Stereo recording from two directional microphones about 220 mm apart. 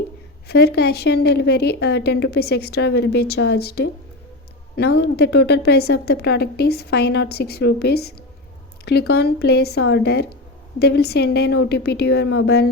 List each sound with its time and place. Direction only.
0.4 s speech: 45° left (ahead or behind)